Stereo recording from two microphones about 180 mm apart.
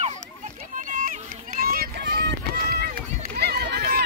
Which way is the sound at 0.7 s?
50° right (ahead or behind).